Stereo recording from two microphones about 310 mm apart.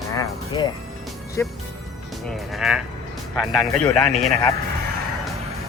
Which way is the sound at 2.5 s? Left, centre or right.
Centre.